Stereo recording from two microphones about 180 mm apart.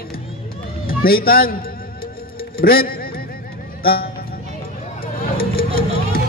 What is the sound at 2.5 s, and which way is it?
Speech, 55° left (ahead or behind).